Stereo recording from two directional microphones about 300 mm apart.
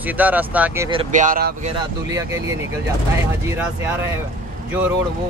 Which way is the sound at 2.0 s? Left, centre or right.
Centre.